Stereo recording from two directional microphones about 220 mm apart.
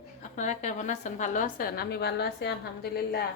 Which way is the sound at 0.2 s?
35° left (ahead or behind).